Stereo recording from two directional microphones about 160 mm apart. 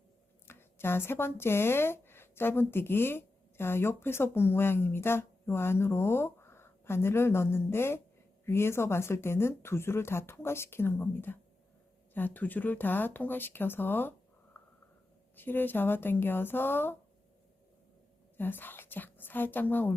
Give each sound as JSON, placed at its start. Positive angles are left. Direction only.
{"t": 0.4, "sound": "speech", "side_deg": 15}
{"t": 14.5, "sound": "a sound", "side_deg": 10}
{"t": 15.4, "sound": "speech", "side_deg": 10}
{"t": 18.3, "sound": "a woman's voice", "side_deg": 10}